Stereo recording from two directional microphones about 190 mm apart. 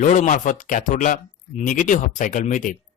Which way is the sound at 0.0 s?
40° left (ahead or behind).